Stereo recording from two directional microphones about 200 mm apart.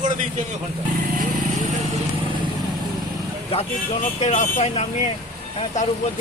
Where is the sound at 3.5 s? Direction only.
30° left (ahead or behind).